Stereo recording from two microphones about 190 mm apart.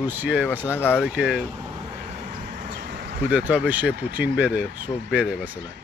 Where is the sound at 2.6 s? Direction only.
45° right (ahead or behind).